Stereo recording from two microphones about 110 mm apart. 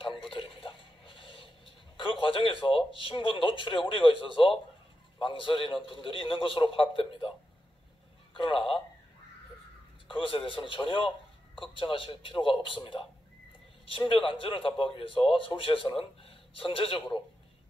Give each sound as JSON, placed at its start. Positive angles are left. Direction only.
{"t": 0.0, "sound": "a sound", "side_deg": 55}
{"t": 2.7, "sound": "a man's voice", "side_deg": 55}
{"t": 10.0, "sound": "a man's voice", "side_deg": 55}